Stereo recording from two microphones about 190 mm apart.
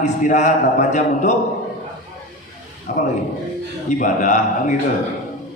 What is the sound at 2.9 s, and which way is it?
A man's voice, 40° left (ahead or behind).